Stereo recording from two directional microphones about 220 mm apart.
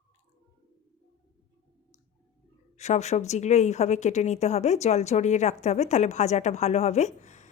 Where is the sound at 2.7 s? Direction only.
30° left (ahead or behind).